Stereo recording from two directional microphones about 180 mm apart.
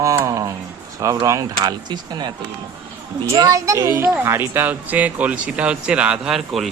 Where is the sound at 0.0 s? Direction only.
15° right (ahead or behind).